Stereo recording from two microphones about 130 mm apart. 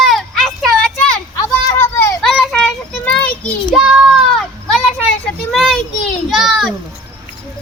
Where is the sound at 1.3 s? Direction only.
25° left (ahead or behind).